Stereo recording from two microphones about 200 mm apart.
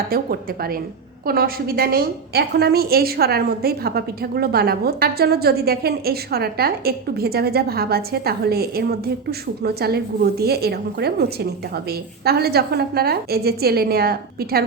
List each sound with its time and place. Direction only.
0.1 s a woman's voice: 50° right (ahead or behind)